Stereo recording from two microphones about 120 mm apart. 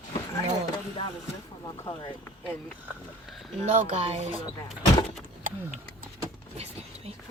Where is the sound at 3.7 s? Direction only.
75° right (ahead or behind).